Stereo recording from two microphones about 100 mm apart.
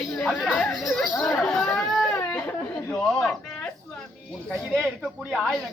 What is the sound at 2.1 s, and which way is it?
Chatter, 15° left (ahead or behind).